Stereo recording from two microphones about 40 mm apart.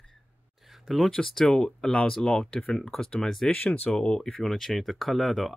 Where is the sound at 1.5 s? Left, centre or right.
Left.